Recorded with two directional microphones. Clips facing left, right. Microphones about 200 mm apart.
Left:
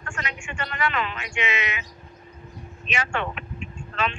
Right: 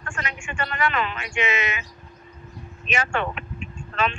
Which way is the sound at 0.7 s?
45° right (ahead or behind).